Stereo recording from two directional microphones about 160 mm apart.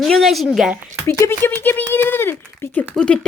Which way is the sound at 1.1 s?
15° left (ahead or behind).